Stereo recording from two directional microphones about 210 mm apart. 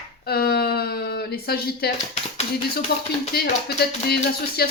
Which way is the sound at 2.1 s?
30° left (ahead or behind).